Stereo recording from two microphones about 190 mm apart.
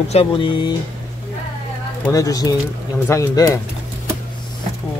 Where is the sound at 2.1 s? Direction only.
20° left (ahead or behind).